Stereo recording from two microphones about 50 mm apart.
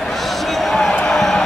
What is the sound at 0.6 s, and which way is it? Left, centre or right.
Basketball bounce, centre.